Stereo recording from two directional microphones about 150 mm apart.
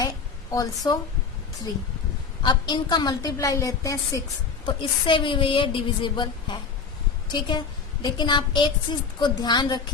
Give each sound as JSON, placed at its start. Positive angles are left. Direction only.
{"t": 0.5, "sound": "a woman's voice", "side_deg": 25}
{"t": 2.4, "sound": "a woman's voice", "side_deg": 30}